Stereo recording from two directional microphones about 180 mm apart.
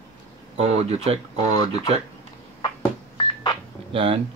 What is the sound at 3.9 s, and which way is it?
Speech, 30° right (ahead or behind).